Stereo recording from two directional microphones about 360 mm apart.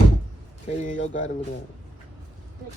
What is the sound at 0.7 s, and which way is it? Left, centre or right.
Speech, centre.